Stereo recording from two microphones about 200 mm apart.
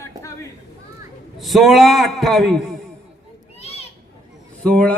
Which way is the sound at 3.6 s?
30° left (ahead or behind).